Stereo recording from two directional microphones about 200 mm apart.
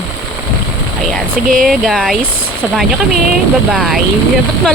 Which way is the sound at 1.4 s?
45° right (ahead or behind).